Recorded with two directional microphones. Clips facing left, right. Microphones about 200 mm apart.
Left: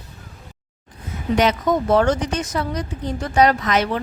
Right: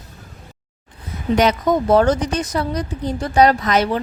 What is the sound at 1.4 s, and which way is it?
A woman's voice, 40° right (ahead or behind).